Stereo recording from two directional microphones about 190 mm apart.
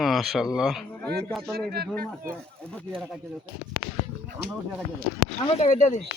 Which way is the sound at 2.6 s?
5° left (ahead or behind).